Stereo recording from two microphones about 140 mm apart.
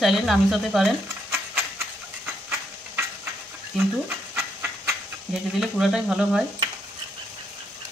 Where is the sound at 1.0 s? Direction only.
15° right (ahead or behind).